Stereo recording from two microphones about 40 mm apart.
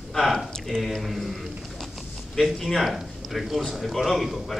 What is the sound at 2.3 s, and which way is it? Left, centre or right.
A man's voice, centre.